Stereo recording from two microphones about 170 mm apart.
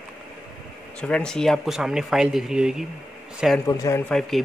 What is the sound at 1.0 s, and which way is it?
Speech, 5° left (ahead or behind).